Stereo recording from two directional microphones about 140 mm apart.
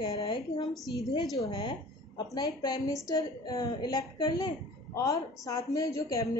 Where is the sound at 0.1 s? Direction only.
40° left (ahead or behind).